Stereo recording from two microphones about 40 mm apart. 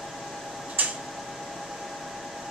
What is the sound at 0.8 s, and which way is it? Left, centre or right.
Tick-tock, right.